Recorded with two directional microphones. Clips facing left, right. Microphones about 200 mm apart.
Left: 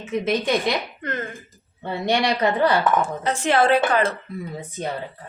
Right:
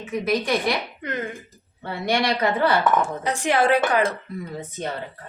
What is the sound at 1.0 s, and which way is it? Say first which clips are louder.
Speech: even; 15° right (ahead or behind).